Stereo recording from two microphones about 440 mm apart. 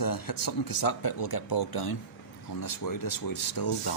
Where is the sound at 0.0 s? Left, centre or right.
Left.